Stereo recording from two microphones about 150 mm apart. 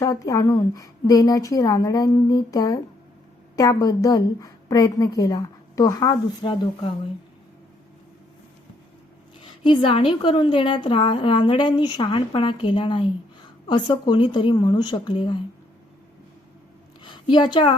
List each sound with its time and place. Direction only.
0.0 s a woman's voice: 20° left (ahead or behind)
9.4 s a woman's voice: 35° left (ahead or behind)
17.0 s a sound: 30° left (ahead or behind)